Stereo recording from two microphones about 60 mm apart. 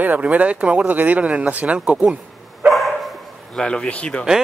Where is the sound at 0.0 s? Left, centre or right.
Right.